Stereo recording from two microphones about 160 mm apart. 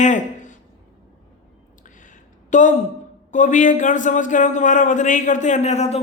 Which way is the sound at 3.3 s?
50° left (ahead or behind).